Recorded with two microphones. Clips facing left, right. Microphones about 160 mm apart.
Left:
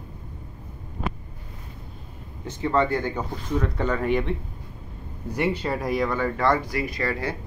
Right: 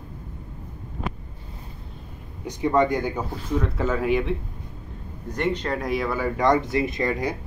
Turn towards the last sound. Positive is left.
turn(degrees=-15)  # may be behind; listen again after turning